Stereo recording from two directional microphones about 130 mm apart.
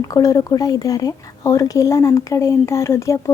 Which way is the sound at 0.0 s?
25° left (ahead or behind).